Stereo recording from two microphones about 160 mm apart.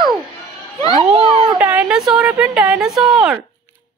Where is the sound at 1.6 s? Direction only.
10° right (ahead or behind).